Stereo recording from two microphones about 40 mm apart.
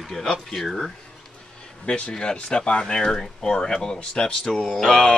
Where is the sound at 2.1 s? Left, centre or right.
Left.